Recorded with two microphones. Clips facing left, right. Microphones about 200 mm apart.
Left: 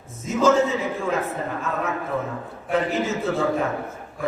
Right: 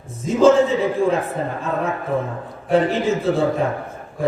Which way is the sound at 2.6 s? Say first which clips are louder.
Right 6 dB; 30° right (ahead or behind).